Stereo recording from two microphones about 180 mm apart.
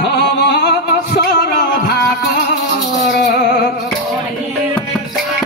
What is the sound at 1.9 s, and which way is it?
Music, 60° left (ahead or behind).